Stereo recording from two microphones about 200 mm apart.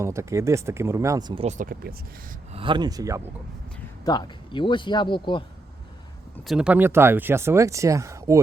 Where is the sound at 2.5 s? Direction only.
25° right (ahead or behind).